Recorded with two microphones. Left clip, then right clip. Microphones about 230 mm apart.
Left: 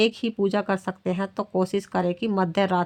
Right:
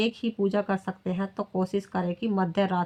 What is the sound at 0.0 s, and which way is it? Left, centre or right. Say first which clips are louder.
Speech: left 5 dB; left.